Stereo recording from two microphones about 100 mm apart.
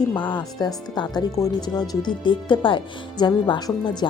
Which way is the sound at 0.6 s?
45° left (ahead or behind).